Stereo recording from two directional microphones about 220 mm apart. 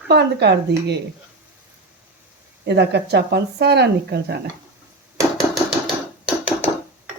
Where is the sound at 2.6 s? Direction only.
50° right (ahead or behind).